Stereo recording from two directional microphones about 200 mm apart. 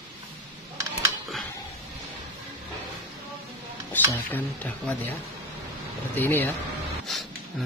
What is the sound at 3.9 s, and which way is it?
Speech, 10° left (ahead or behind).